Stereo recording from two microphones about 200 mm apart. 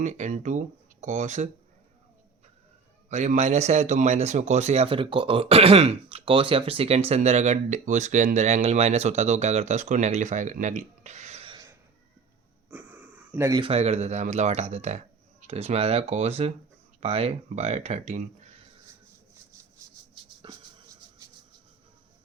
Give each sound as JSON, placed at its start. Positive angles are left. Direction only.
{"t": 0.0, "sound": "speech", "side_deg": -35}
{"t": 3.1, "sound": "speech", "side_deg": -35}
{"t": 12.7, "sound": "wheeze", "side_deg": -10}
{"t": 13.7, "sound": "speech", "side_deg": -30}
{"t": 20.4, "sound": "a sound", "side_deg": -25}